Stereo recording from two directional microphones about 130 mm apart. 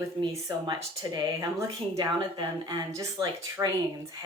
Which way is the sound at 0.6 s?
30° right (ahead or behind).